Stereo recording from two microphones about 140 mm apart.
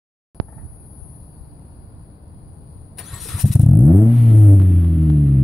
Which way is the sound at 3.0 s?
Centre (ahead or behind).